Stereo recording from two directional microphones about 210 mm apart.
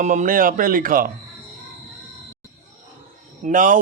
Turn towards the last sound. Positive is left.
turn(degrees=-40)  # may be behind; listen again after turning